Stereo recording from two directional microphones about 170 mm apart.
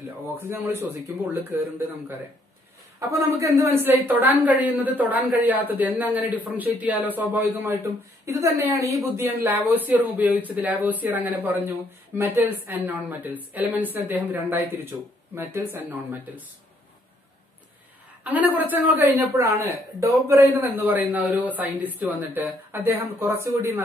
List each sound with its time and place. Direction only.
0.5 s speech: 10° right (ahead or behind)
18.2 s speech: 10° right (ahead or behind)